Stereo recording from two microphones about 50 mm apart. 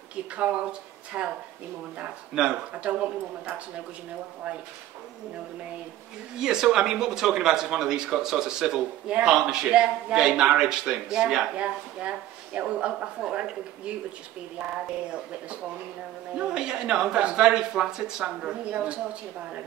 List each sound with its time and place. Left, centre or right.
0.1 s speech: right
2.3 s speech: right
6.3 s speech: centre
11.5 s speech: right
16.3 s speech: centre